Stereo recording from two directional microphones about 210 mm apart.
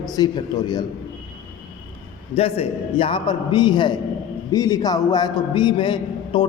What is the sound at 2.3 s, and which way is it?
A man's voice, 30° left (ahead or behind).